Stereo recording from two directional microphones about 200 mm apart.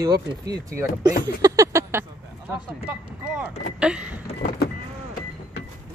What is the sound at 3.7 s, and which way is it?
Vehicle, 5° right (ahead or behind).